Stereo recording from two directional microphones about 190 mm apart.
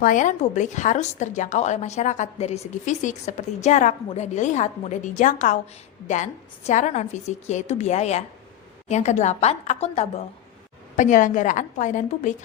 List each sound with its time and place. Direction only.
0.0 s a woman's voice: 45° left (ahead or behind)